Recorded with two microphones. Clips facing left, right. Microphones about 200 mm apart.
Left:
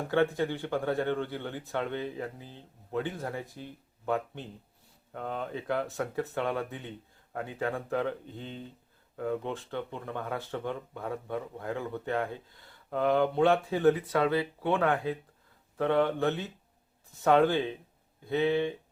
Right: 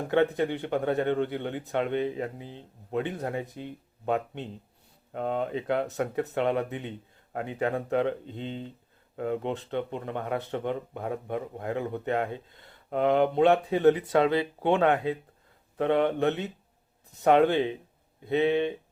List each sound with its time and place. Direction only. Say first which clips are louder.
0.1 s speech: right 3 dB; 20° right (ahead or behind)